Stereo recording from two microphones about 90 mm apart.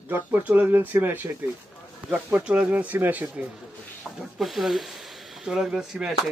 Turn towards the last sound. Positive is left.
turn(degrees=-5)  # may be behind; listen again after turning